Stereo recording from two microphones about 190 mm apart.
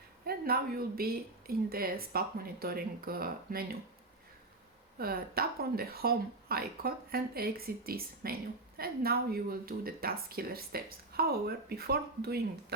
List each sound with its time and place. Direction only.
0.3 s speech: 55° right (ahead or behind)
4.9 s speech: 50° right (ahead or behind)